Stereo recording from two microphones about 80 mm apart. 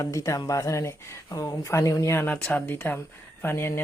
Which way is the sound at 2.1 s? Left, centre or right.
Left.